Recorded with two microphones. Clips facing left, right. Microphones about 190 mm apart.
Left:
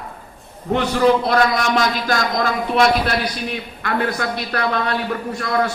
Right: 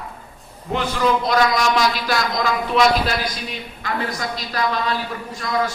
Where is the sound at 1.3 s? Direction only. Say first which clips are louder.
Left 1 dB; 55° left (ahead or behind).